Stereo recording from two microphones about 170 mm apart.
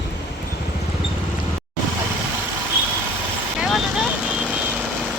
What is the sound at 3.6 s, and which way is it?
Vehicle, centre (ahead or behind).